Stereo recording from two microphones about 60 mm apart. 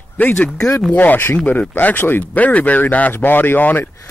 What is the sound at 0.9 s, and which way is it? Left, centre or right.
Speech, left.